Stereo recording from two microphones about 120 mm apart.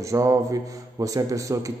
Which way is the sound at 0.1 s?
25° right (ahead or behind).